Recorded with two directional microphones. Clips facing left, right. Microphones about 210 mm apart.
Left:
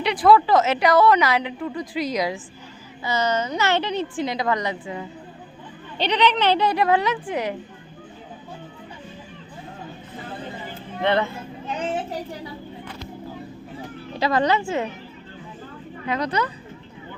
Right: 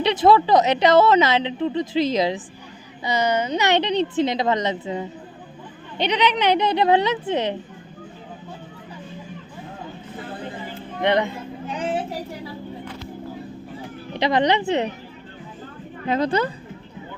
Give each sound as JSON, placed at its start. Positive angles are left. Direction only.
{"t": 0.0, "sound": "a woman's voice", "side_deg": -20}
{"t": 6.0, "sound": "a woman's voice", "side_deg": -10}
{"t": 11.0, "sound": "speech", "side_deg": -15}
{"t": 14.2, "sound": "a woman's voice", "side_deg": -20}
{"t": 16.0, "sound": "a woman's voice", "side_deg": -25}